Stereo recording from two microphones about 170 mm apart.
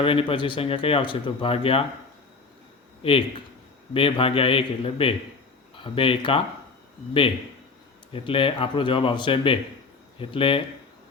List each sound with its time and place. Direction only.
0.0 s speech: 30° left (ahead or behind)
3.0 s a man's voice: 35° left (ahead or behind)
8.1 s speech: 30° left (ahead or behind)